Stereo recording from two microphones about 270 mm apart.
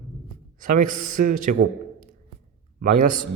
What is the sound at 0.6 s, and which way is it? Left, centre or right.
Speech, right.